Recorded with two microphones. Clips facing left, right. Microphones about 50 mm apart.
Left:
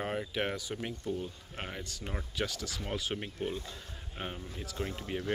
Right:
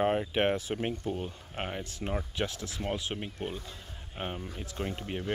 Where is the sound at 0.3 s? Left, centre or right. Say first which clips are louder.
Right 6 dB; right.